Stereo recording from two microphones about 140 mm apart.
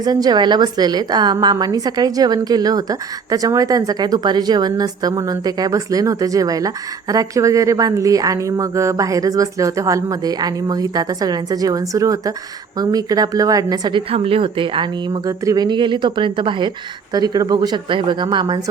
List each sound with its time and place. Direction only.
0.0 s a woman's voice: 30° right (ahead or behind)
14.1 s a woman's voice: 40° right (ahead or behind)